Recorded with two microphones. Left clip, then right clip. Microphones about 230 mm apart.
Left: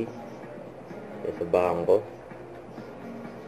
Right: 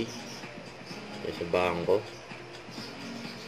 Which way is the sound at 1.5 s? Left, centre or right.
Right.